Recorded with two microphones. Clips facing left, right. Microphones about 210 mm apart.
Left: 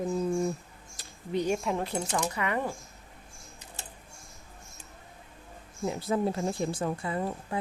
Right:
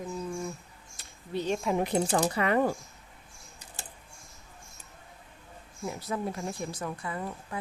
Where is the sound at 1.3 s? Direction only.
15° left (ahead or behind).